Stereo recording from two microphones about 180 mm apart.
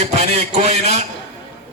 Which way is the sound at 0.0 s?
40° right (ahead or behind).